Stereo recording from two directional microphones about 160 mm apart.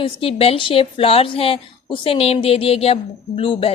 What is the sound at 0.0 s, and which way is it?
A woman's voice, 35° left (ahead or behind).